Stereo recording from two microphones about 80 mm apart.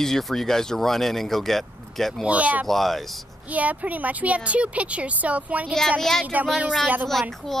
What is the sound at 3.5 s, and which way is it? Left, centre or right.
Speech, centre.